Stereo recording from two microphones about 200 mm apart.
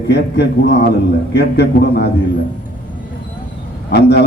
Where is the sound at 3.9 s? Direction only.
55° left (ahead or behind).